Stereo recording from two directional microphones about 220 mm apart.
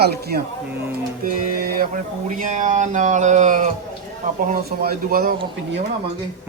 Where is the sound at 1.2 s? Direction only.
40° right (ahead or behind).